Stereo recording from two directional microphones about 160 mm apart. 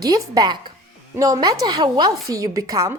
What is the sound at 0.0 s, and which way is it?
A woman's voice, 20° right (ahead or behind).